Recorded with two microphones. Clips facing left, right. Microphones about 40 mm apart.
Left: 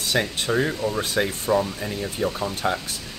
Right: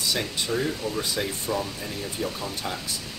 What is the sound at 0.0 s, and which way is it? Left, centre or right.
Speech, left.